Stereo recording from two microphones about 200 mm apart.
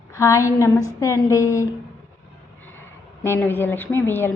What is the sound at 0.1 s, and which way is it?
A woman's voice, 15° left (ahead or behind).